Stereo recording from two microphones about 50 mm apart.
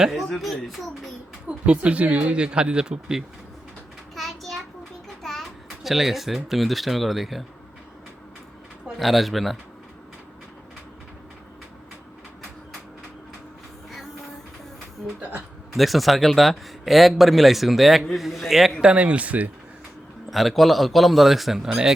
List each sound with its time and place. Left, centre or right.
0.3 s speech: centre
1.5 s speech: right
4.1 s a sound: centre
5.6 s speech: centre
9.0 s speech: centre
15.0 s speech: right
15.7 s speech: centre
18.8 s speech: right
20.3 s speech: centre